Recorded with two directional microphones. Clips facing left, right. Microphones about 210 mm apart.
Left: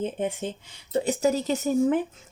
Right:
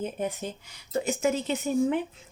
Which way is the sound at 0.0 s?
25° left (ahead or behind).